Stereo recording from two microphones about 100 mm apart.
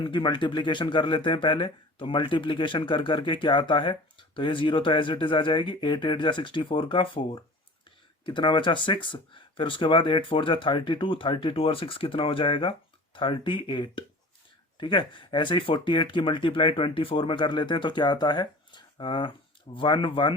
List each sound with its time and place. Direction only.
0.0 s speech: 50° left (ahead or behind)